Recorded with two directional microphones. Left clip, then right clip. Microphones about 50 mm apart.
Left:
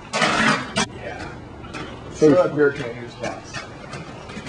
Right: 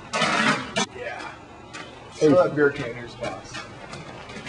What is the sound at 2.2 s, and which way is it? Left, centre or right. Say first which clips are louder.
Speech: left 2 dB; centre.